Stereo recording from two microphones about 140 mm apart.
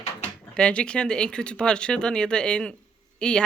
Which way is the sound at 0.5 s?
5° left (ahead or behind).